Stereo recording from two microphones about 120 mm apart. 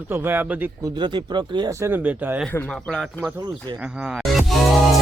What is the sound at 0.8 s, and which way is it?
Speech, 40° right (ahead or behind).